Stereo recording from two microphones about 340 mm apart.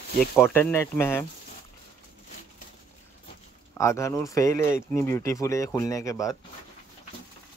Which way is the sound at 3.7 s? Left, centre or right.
Centre.